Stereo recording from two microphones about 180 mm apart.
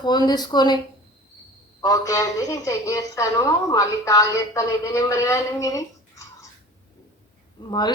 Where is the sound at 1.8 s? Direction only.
20° left (ahead or behind).